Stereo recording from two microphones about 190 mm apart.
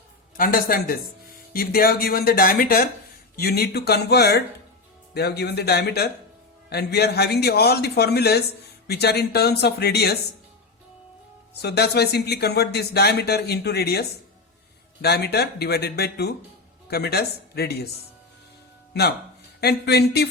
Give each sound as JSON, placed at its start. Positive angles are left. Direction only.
{"t": 0.3, "sound": "speech", "side_deg": 50}
{"t": 11.6, "sound": "speech", "side_deg": 60}
{"t": 19.5, "sound": "speech", "side_deg": 60}